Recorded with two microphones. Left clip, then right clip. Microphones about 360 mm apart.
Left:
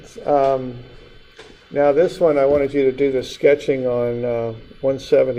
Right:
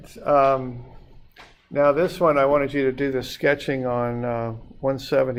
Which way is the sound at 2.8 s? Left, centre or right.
Right.